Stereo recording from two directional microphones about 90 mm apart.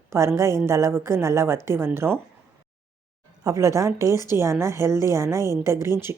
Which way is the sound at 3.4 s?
35° right (ahead or behind).